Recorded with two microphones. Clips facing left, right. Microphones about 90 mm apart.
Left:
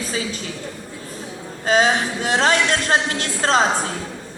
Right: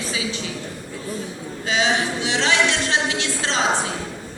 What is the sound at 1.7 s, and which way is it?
A woman's voice, 45° left (ahead or behind).